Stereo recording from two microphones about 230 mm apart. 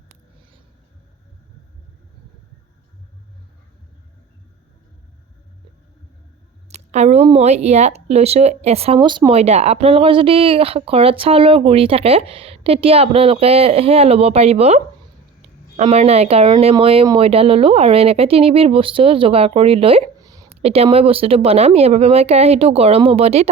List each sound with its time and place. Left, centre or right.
6.7 s speech: right
15.8 s speech: right
20.6 s speech: right